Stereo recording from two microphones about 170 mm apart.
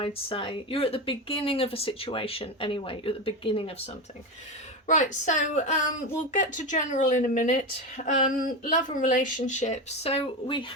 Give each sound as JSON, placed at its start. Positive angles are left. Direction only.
{"t": 0.0, "sound": "speech", "side_deg": 30}
{"t": 4.9, "sound": "speech", "side_deg": 45}